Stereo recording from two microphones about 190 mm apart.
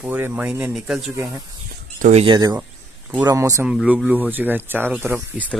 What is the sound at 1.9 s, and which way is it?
Speech, 45° right (ahead or behind).